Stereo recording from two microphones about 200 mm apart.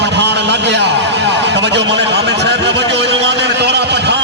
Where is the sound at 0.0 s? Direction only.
60° right (ahead or behind).